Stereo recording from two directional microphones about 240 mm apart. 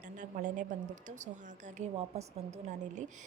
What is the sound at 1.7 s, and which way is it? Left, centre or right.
Speech, right.